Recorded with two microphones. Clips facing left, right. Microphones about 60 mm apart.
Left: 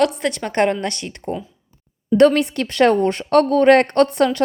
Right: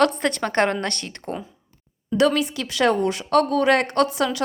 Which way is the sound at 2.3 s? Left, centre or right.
Left.